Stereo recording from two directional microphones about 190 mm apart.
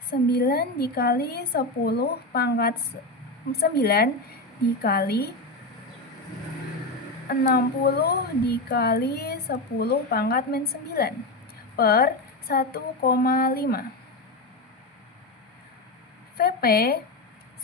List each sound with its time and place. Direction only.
0.1 s speech: 55° left (ahead or behind)
7.3 s speech: 50° left (ahead or behind)
16.4 s speech: 55° left (ahead or behind)